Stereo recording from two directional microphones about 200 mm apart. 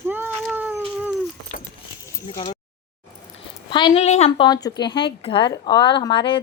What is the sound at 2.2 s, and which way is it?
Speech, 25° left (ahead or behind).